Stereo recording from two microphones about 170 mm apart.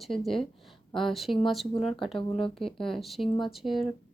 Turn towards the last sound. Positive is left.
turn(degrees=0)  # may be behind; listen again after turning